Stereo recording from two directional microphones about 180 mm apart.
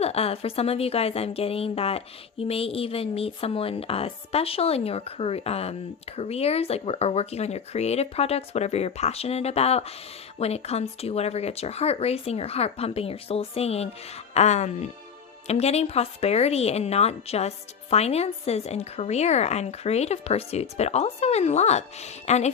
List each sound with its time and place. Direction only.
0.0 s a woman's voice: 35° left (ahead or behind)